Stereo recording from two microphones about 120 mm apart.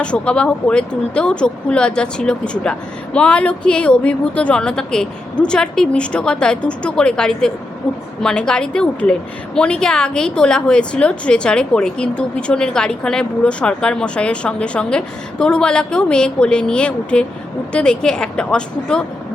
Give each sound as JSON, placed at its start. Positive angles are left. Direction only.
{"t": 0.0, "sound": "a woman's voice", "side_deg": 10}